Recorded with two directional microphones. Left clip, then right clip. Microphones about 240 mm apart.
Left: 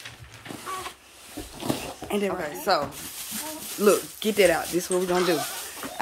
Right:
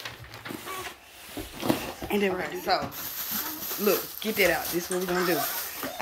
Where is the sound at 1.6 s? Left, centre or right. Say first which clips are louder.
Right 2 dB; centre.